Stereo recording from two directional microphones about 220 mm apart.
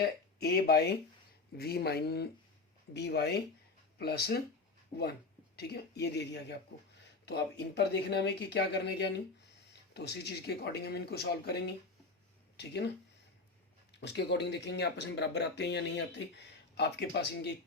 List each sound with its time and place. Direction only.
0.0 s speech: 45° left (ahead or behind)
4.9 s speech: 30° left (ahead or behind)
5.5 s speech: 45° left (ahead or behind)
14.0 s speech: 50° left (ahead or behind)